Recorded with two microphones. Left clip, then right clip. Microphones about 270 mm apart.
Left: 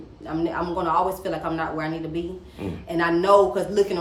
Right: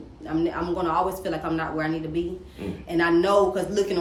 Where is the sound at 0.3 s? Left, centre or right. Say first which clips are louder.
Even; centre.